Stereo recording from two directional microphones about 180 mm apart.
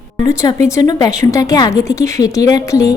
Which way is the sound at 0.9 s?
20° left (ahead or behind).